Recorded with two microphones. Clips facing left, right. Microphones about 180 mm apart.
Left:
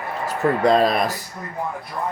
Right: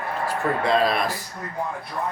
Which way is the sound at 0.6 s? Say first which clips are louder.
Left 4 dB; 40° left (ahead or behind).